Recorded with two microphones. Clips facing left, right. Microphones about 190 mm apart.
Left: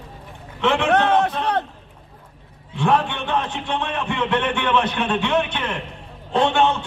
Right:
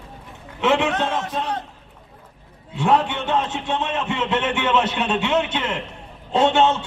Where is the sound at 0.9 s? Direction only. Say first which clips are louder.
Left 6 dB; 65° left (ahead or behind).